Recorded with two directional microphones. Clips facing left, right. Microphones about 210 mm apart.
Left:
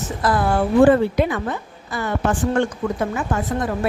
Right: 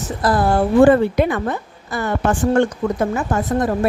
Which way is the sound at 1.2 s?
50° right (ahead or behind).